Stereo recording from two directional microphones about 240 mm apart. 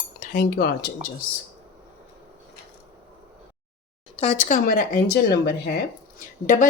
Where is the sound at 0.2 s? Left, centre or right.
Left.